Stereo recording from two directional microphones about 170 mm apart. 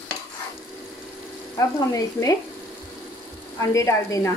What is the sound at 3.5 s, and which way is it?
Speech, 20° left (ahead or behind).